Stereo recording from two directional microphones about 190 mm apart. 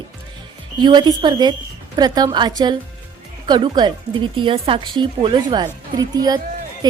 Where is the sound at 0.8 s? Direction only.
25° right (ahead or behind).